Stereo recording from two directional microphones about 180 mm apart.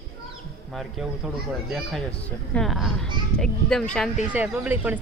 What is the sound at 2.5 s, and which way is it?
A woman's voice, centre (ahead or behind).